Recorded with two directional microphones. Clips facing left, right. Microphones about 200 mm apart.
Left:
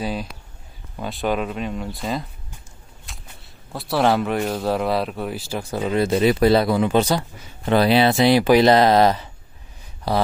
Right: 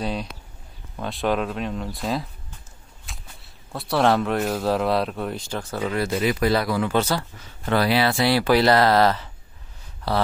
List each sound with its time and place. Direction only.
0.0 s speech: centre (ahead or behind)
3.1 s a sound: centre (ahead or behind)
3.7 s speech: centre (ahead or behind)
5.9 s speech: 25° left (ahead or behind)